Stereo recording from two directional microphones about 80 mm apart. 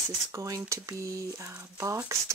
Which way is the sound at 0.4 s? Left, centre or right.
Right.